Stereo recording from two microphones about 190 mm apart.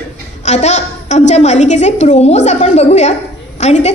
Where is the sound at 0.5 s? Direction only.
35° left (ahead or behind).